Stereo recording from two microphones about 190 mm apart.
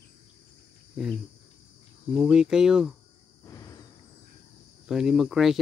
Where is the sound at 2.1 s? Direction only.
Centre (ahead or behind).